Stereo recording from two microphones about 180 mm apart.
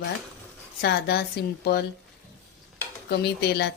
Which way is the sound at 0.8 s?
65° left (ahead or behind).